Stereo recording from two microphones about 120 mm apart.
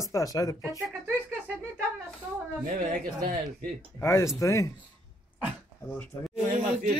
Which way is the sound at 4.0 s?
25° left (ahead or behind).